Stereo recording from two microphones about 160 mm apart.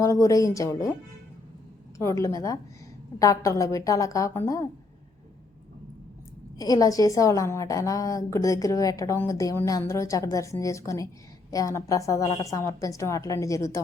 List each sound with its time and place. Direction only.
0.0 s a woman's voice: 20° left (ahead or behind)
2.0 s a woman's voice: 20° left (ahead or behind)
6.6 s a woman's voice: 20° left (ahead or behind)